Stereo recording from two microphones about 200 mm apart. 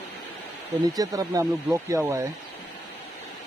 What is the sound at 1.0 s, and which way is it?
Speech, 15° right (ahead or behind).